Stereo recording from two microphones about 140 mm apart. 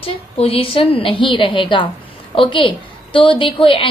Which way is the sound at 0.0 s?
40° left (ahead or behind).